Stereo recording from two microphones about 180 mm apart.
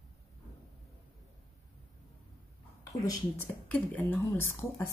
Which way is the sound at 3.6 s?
10° left (ahead or behind).